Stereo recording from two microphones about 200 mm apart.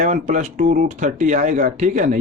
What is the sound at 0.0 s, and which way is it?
Speech, 40° right (ahead or behind).